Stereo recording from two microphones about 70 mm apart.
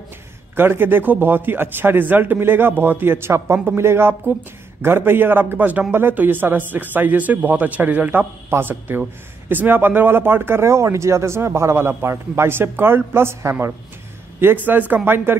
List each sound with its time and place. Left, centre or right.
0.6 s a man's voice: right